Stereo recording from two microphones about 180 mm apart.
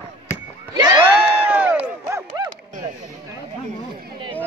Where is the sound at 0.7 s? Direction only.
20° right (ahead or behind).